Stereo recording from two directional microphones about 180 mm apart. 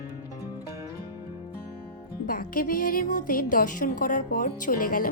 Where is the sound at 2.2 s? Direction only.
50° left (ahead or behind).